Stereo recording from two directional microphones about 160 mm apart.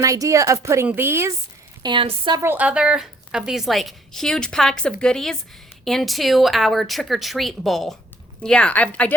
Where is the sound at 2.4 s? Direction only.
10° right (ahead or behind).